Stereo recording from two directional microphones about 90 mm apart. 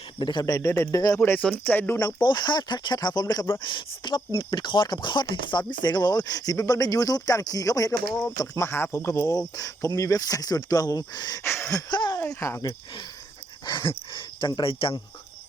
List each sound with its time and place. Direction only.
0.2 s speech: 55° left (ahead or behind)
0.4 s speech: 40° left (ahead or behind)
1.2 s speech: 20° left (ahead or behind)
2.1 s speech: 55° left (ahead or behind)
11.4 s speech: 30° left (ahead or behind)
11.9 s speech: 55° left (ahead or behind)
12.3 s speech: 35° left (ahead or behind)
12.6 s speech: 55° left (ahead or behind); by 14.9 s 85° left